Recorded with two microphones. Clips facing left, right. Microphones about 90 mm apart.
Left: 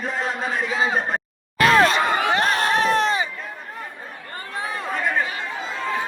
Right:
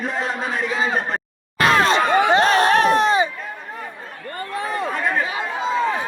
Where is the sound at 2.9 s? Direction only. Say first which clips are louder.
Right 4 dB; 20° right (ahead or behind).